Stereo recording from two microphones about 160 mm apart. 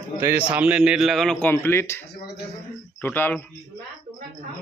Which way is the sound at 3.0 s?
10° left (ahead or behind).